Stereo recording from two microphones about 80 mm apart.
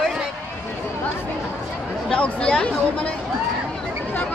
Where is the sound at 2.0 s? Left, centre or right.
Centre.